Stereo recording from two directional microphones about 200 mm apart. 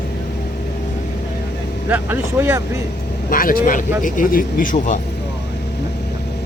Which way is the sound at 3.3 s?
45° left (ahead or behind).